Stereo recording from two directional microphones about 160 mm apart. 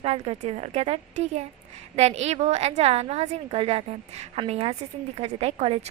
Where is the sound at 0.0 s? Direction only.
40° right (ahead or behind).